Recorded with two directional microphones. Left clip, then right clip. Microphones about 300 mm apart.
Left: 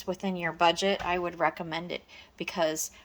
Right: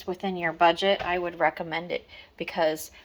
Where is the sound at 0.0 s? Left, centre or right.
Centre.